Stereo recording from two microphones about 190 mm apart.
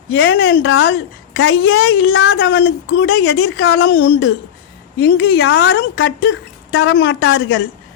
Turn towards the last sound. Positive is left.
turn(degrees=65)  # may be behind; listen again after turning